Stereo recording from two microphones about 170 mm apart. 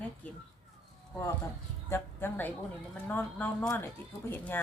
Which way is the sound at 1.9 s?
15° left (ahead or behind).